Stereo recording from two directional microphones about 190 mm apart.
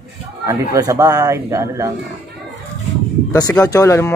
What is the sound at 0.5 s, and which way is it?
A man's voice, 20° right (ahead or behind).